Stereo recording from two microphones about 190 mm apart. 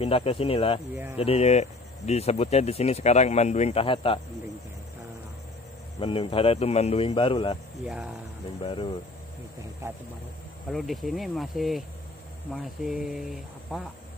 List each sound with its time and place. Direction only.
0.0 s a man's voice: 30° left (ahead or behind)
5.9 s a man's voice: 30° left (ahead or behind)
7.8 s speech: 5° right (ahead or behind)
8.5 s a man's voice: 30° left (ahead or behind)
9.8 s speech: 15° right (ahead or behind)
10.7 s speech: centre (ahead or behind)